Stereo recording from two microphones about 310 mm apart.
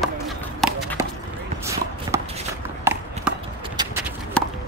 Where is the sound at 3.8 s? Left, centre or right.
Centre.